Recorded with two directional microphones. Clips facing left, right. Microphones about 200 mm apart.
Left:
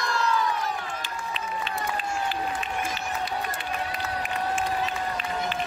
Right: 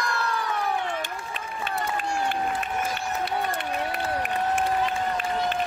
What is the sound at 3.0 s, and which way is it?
Crowd, 65° right (ahead or behind).